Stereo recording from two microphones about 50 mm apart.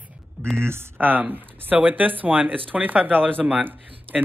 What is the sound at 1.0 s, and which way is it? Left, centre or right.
Speech, right.